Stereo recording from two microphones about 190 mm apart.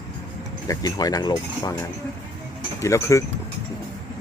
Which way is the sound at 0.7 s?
20° left (ahead or behind).